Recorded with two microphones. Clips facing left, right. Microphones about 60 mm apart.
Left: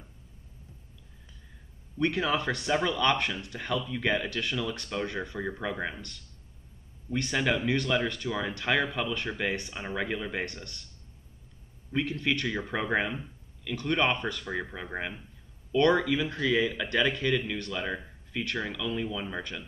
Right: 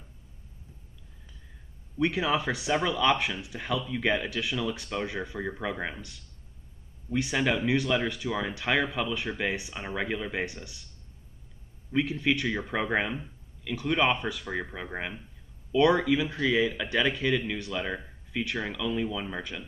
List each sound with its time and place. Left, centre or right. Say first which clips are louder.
2.0 s speech: right 1 dB; centre
11.9 s a man's voice: right 2 dB; centre